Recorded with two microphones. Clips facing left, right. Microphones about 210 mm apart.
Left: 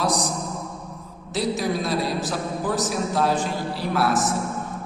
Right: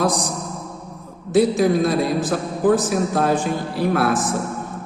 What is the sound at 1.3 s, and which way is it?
A man's voice, 50° right (ahead or behind).